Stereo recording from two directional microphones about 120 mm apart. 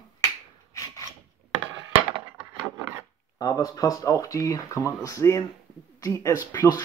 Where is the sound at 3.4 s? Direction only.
30° left (ahead or behind).